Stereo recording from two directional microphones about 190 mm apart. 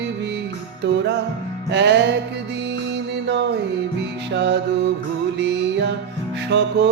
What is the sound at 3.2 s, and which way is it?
Music, 70° right (ahead or behind).